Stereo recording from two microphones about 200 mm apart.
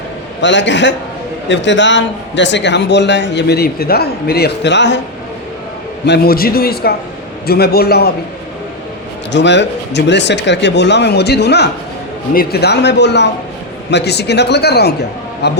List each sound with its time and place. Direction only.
0.4 s a man's voice: 65° left (ahead or behind)
6.1 s a man's voice: 50° left (ahead or behind)
9.3 s a man's voice: 60° left (ahead or behind)